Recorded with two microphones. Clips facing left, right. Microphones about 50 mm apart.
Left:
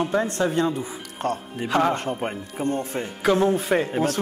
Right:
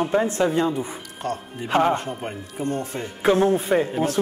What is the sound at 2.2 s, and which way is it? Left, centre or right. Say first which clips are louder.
Speech: left 2 dB; left.